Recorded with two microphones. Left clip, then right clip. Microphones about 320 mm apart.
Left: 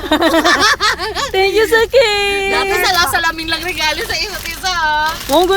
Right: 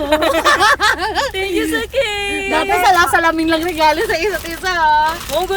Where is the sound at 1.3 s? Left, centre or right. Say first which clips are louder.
Left 7 dB; centre.